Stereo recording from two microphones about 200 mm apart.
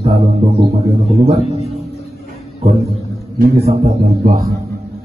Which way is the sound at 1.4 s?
30° left (ahead or behind).